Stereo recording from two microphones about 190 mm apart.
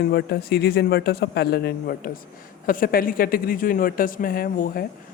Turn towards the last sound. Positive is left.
turn(degrees=50)  # may be behind; listen again after turning